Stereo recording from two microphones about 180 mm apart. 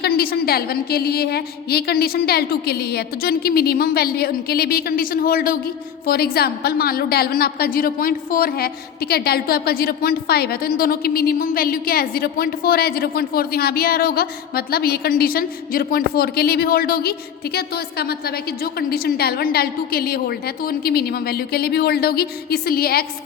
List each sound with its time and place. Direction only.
0.0 s a woman's voice: 60° left (ahead or behind)